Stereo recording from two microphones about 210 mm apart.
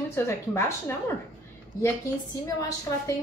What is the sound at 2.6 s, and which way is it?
Speech, 15° left (ahead or behind).